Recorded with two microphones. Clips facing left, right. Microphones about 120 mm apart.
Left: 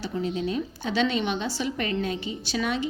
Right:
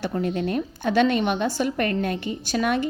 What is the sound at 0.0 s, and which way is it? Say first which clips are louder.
A woman's voice: right 3 dB; 55° right (ahead or behind).